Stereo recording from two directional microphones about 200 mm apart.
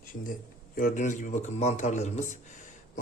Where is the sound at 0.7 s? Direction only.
40° left (ahead or behind).